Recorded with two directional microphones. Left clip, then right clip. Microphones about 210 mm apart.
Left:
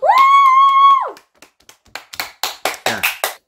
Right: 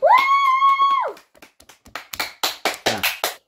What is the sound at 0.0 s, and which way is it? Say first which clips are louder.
Music: left 5 dB; 50° left (ahead or behind).